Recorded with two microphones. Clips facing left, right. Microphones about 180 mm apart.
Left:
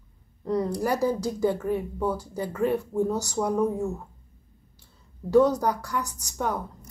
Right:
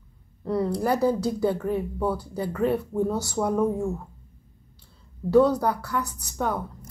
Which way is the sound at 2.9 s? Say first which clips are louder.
Even; 15° left (ahead or behind).